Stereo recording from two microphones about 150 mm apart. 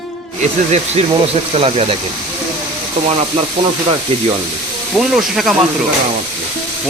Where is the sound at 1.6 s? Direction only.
40° right (ahead or behind).